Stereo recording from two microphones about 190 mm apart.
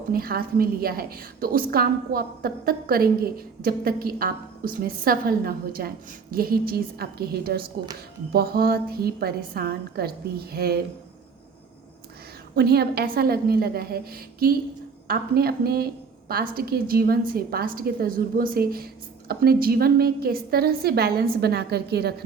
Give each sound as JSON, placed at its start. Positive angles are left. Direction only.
{"t": 0.1, "sound": "a woman's voice", "side_deg": -50}
{"t": 12.5, "sound": "a woman's voice", "side_deg": -55}